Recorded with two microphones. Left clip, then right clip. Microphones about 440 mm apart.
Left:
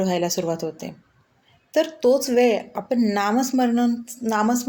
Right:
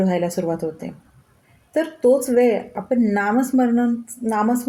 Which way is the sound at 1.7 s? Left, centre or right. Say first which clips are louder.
Right 1 dB; right.